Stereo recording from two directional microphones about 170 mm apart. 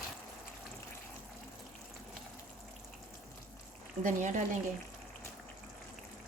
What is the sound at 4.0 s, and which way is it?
Speech, 50° right (ahead or behind).